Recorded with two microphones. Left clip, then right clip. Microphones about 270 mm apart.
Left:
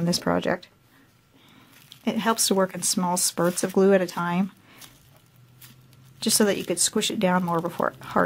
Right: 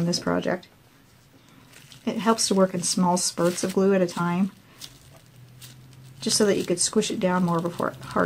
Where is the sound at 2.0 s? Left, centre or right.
Left.